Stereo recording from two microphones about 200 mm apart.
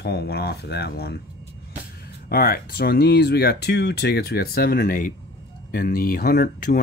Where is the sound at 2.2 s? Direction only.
50° left (ahead or behind).